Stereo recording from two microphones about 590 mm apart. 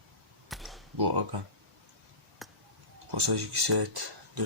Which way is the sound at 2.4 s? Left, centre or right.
Centre.